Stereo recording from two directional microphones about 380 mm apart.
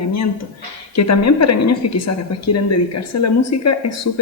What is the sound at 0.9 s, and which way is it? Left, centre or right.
Speech, left.